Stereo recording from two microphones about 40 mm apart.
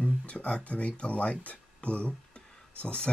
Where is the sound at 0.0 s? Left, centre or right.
Left.